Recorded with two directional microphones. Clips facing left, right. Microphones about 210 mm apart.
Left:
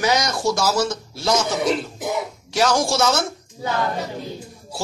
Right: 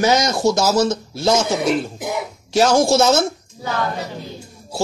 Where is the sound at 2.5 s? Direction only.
25° right (ahead or behind).